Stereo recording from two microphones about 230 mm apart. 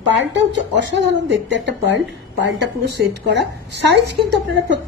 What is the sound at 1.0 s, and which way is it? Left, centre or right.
A woman's voice, right.